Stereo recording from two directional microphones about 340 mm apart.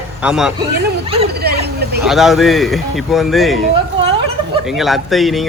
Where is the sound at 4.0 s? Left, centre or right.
Centre.